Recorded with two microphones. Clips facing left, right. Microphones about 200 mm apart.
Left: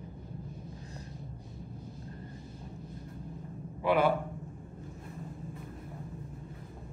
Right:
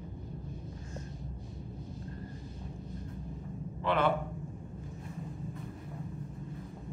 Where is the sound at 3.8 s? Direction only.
10° left (ahead or behind).